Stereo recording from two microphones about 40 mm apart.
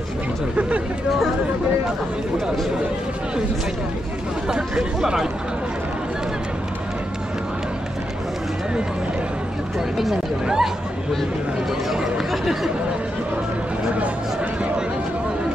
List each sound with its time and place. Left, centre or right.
0.6 s a sound: right
4.5 s speech: centre
10.4 s speech: centre
11.9 s speech: centre